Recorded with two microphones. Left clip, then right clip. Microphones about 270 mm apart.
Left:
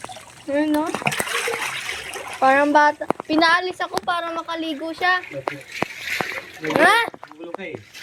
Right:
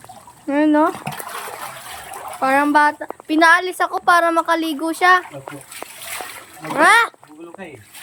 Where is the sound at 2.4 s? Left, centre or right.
Centre.